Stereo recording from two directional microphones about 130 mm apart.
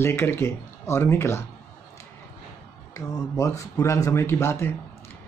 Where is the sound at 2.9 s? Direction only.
25° left (ahead or behind).